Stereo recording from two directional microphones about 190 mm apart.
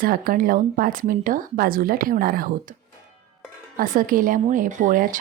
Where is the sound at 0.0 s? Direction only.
50° right (ahead or behind).